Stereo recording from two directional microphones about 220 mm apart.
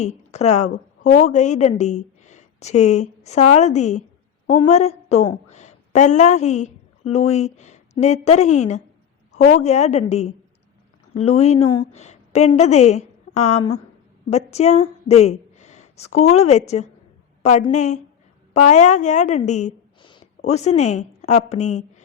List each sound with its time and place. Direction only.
0.3 s a woman's voice: 30° left (ahead or behind)